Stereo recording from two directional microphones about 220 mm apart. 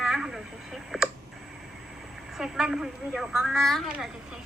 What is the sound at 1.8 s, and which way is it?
A woman's voice, centre (ahead or behind).